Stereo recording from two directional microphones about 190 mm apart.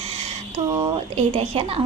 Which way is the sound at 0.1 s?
35° right (ahead or behind).